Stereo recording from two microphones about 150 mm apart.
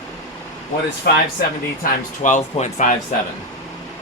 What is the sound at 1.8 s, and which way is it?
Speech, 60° left (ahead or behind).